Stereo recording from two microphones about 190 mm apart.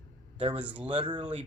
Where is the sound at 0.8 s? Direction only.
25° right (ahead or behind).